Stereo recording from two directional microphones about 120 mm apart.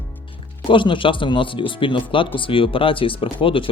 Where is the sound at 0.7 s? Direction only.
45° left (ahead or behind).